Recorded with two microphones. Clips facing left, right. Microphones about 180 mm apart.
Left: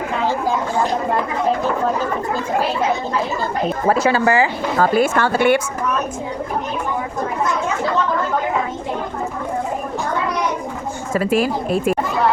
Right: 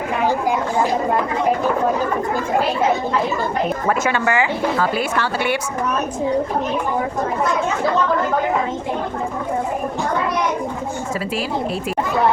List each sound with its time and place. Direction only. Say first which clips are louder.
3.8 s speech: left 6 dB; 35° left (ahead or behind); by 5.5 s 50° left (ahead or behind)
11.1 s speech: left 8 dB; 50° left (ahead or behind)